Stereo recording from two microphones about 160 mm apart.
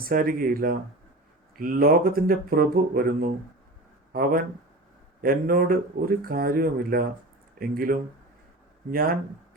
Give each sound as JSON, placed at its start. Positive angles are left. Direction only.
{"t": 0.0, "sound": "speech", "side_deg": -65}